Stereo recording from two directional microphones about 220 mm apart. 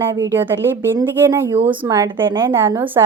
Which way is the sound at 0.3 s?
10° right (ahead or behind).